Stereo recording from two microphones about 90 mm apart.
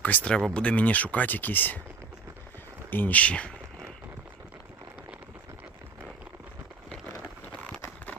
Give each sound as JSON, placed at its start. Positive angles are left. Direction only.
{"t": 0.0, "sound": "speech", "side_deg": 20}
{"t": 2.9, "sound": "speech", "side_deg": 20}
{"t": 7.4, "sound": "a sound", "side_deg": 20}